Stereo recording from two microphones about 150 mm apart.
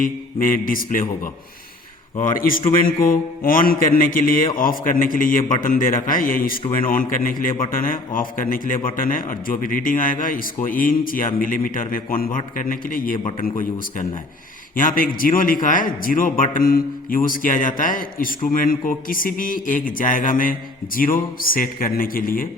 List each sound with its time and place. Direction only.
0.0 s a man's voice: 65° left (ahead or behind)
2.3 s a man's voice: 65° left (ahead or behind)